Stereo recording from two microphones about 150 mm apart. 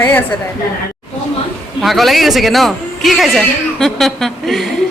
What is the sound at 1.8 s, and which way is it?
Speech, centre (ahead or behind).